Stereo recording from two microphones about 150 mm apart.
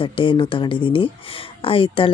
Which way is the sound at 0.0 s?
35° left (ahead or behind).